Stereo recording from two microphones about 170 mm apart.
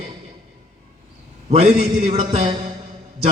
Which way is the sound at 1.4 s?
40° right (ahead or behind).